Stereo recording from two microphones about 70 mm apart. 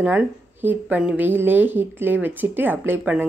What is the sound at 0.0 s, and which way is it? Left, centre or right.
A woman's voice, right.